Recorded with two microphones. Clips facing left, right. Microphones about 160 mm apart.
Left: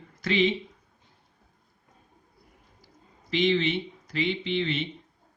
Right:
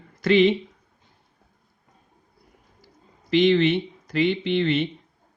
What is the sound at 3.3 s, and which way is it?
Speech, 60° right (ahead or behind).